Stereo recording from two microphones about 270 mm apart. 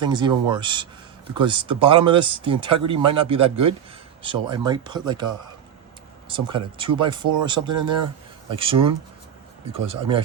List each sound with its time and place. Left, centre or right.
0.0 s speech: centre